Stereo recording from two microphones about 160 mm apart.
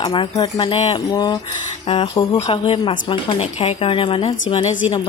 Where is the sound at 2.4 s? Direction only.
35° left (ahead or behind).